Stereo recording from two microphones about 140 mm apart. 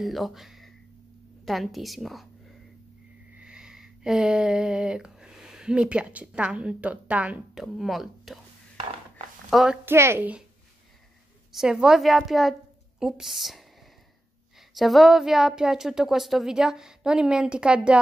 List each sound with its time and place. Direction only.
0.0 s a woman's voice: centre (ahead or behind)
3.3 s a sound: 5° right (ahead or behind)
9.5 s a woman's voice: centre (ahead or behind)
9.8 s a woman's voice: 15° right (ahead or behind)
11.5 s a woman's voice: 5° right (ahead or behind)
14.7 s a woman's voice: centre (ahead or behind)